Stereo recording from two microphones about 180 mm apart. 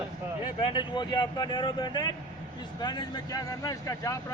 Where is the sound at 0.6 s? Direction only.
25° left (ahead or behind).